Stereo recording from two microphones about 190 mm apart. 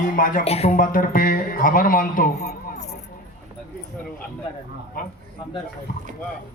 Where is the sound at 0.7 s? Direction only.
45° left (ahead or behind).